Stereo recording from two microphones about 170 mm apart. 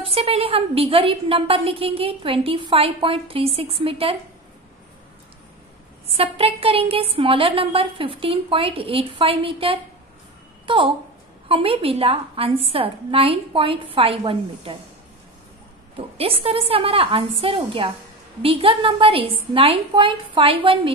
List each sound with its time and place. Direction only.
0.0 s a woman's voice: 35° right (ahead or behind)
6.1 s a woman's voice: 35° right (ahead or behind)
16.2 s a woman's voice: 35° right (ahead or behind)